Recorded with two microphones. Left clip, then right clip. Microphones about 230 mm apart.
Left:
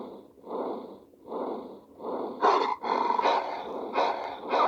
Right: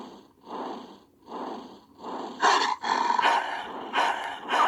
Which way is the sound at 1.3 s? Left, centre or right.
Right.